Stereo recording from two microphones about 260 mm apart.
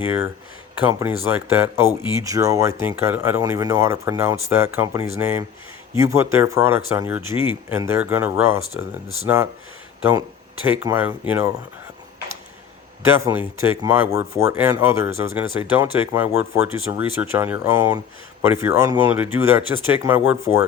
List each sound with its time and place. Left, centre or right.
0.0 s speech: centre
13.1 s speech: centre